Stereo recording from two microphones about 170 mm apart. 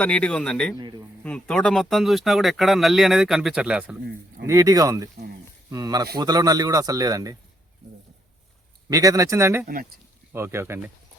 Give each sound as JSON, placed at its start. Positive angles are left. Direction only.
{"t": 0.0, "sound": "speech", "side_deg": 5}
{"t": 0.8, "sound": "a sound", "side_deg": -25}
{"t": 1.2, "sound": "speech", "side_deg": 5}
{"t": 4.4, "sound": "speech", "side_deg": -20}
{"t": 8.9, "sound": "speech", "side_deg": -20}
{"t": 9.6, "sound": "speech", "side_deg": -55}
{"t": 10.3, "sound": "speech", "side_deg": -15}